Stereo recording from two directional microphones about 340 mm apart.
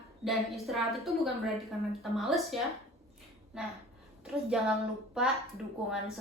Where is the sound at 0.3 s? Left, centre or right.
Centre.